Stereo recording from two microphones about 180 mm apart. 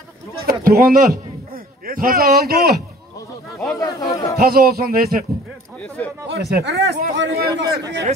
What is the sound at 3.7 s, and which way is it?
Speech, 20° left (ahead or behind).